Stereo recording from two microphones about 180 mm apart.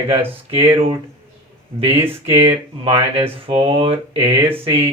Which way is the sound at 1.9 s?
15° right (ahead or behind).